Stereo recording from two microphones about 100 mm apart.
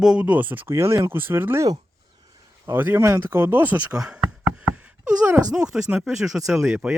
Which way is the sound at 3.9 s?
5° right (ahead or behind).